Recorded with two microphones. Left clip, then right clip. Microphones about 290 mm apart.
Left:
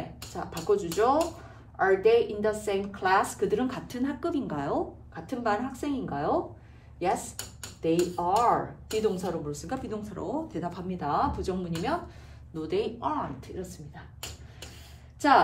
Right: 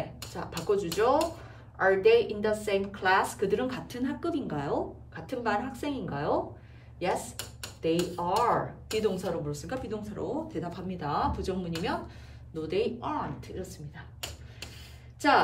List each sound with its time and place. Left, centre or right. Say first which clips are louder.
0.3 s a woman's voice: left 3 dB; centre
15.1 s a woman's voice: left 2 dB; left